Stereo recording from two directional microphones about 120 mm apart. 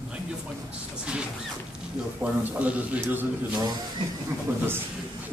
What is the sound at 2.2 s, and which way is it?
Speech, 10° right (ahead or behind).